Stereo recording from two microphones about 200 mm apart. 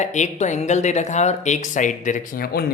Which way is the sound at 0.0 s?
35° left (ahead or behind).